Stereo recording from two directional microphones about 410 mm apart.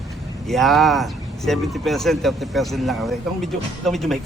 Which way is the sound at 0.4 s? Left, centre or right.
Centre.